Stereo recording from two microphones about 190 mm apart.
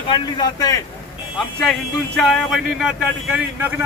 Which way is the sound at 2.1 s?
Centre (ahead or behind).